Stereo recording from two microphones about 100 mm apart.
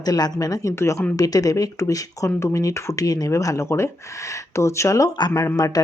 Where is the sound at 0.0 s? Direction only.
40° left (ahead or behind).